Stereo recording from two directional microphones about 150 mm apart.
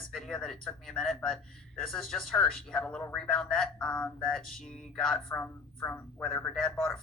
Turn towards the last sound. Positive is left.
turn(degrees=5)  # may be behind; listen again after turning